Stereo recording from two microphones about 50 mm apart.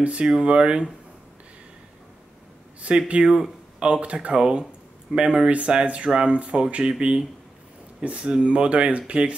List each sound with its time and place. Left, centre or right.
0.0 s speech: right
2.8 s speech: right
3.3 s speech: centre
3.8 s speech: right